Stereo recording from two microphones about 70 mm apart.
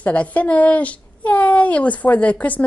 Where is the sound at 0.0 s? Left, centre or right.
Left.